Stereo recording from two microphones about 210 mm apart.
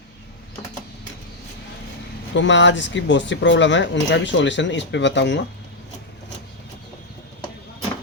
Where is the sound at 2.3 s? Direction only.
60° left (ahead or behind).